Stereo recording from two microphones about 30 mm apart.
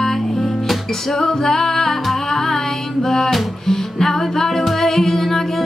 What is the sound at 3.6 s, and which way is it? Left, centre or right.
Music, centre.